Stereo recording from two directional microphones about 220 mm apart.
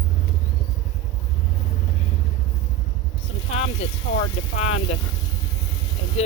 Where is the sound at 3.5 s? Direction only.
25° left (ahead or behind).